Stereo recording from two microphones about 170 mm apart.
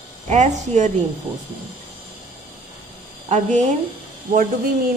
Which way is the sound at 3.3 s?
45° right (ahead or behind).